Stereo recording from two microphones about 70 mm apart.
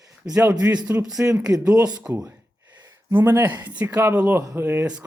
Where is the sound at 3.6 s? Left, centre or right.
Right.